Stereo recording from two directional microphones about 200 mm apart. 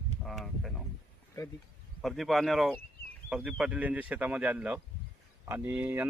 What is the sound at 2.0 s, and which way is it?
Speech, centre (ahead or behind).